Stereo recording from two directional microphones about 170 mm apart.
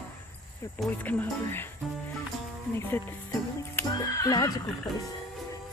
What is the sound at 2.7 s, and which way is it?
Neigh, 15° left (ahead or behind).